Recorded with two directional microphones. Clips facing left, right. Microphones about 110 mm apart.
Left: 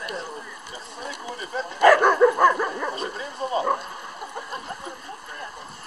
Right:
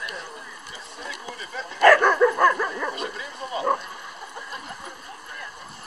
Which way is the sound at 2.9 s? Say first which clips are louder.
Left 2 dB; 35° left (ahead or behind).